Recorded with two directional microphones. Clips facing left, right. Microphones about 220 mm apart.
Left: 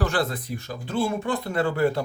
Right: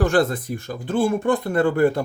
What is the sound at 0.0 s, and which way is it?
Speech, 50° right (ahead or behind).